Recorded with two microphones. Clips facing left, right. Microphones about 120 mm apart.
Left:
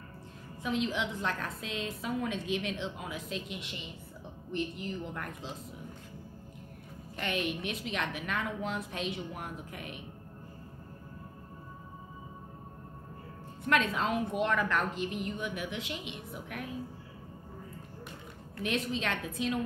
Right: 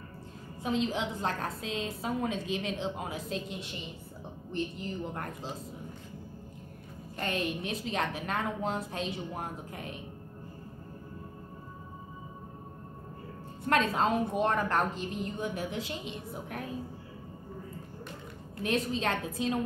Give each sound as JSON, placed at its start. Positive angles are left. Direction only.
{"t": 0.6, "sound": "a woman's voice", "side_deg": -35}
{"t": 7.2, "sound": "a woman's voice", "side_deg": -35}
{"t": 13.7, "sound": "a woman's voice", "side_deg": -35}
{"t": 18.6, "sound": "a woman's voice", "side_deg": -40}